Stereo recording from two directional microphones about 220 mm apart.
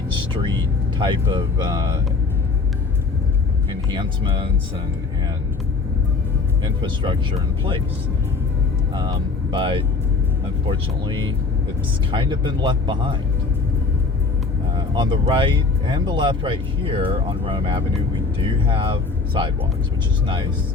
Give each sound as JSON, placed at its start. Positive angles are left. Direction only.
{"t": 0.9, "sound": "speech", "side_deg": -20}
{"t": 3.7, "sound": "speech", "side_deg": -20}
{"t": 6.8, "sound": "speech", "side_deg": -20}
{"t": 8.9, "sound": "speech", "side_deg": -20}
{"t": 14.8, "sound": "speech", "side_deg": -20}